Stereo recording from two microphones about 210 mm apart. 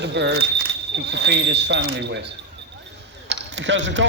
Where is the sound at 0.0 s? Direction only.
55° right (ahead or behind).